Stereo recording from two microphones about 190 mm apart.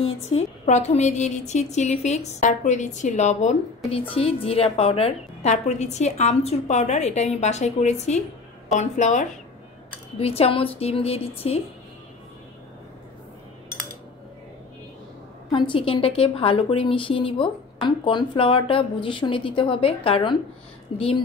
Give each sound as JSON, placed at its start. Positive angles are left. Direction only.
{"t": 0.4, "sound": "a woman's voice", "side_deg": 35}
{"t": 15.5, "sound": "a woman's voice", "side_deg": 25}